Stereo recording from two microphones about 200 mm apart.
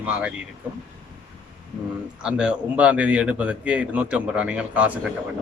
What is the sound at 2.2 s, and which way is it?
A man's voice, 5° right (ahead or behind).